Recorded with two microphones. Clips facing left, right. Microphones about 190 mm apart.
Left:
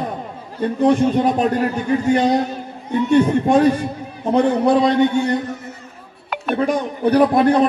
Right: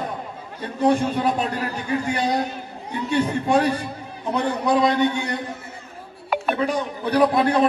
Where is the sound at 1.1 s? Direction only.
45° left (ahead or behind).